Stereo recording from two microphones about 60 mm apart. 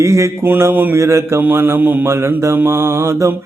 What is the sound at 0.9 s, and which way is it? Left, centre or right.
Speech, right.